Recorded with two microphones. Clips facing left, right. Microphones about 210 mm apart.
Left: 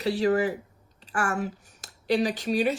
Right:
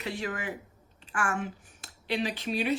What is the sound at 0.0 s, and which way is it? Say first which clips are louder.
A woman's voice: left 11 dB; 35° left (ahead or behind).